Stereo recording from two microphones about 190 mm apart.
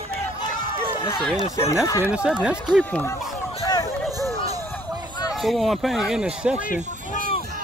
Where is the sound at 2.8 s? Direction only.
5° left (ahead or behind).